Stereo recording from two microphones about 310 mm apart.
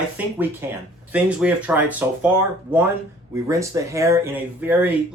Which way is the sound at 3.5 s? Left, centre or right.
Centre.